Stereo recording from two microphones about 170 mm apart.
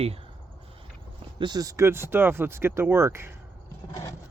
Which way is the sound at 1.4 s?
25° right (ahead or behind).